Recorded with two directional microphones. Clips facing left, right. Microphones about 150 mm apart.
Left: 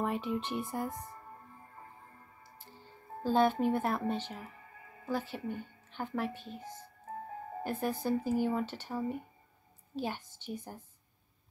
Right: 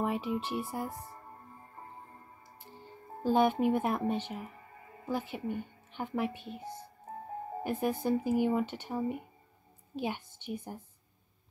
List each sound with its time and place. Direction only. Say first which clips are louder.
0.0 s speech: right 1 dB; 5° right (ahead or behind)
3.3 s a woman's voice: right 1 dB; 15° right (ahead or behind)
10.5 s speech: right 2 dB; 10° right (ahead or behind)